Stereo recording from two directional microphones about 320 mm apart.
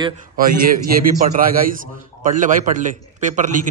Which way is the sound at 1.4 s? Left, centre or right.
Right.